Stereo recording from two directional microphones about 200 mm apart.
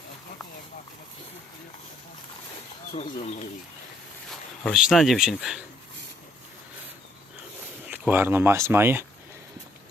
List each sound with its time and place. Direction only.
2.9 s speech: 35° left (ahead or behind)
4.3 s speech: centre (ahead or behind)
7.9 s speech: 10° right (ahead or behind)